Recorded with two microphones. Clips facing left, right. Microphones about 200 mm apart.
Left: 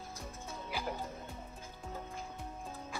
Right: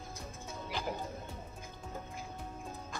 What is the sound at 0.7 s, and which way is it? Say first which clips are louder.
Music: right 1 dB; 10° left (ahead or behind).